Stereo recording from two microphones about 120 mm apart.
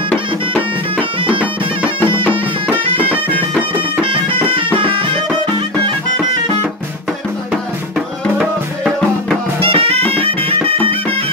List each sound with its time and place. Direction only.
4.0 s music: 45° right (ahead or behind)
8.4 s music: centre (ahead or behind)
9.6 s music: 50° right (ahead or behind)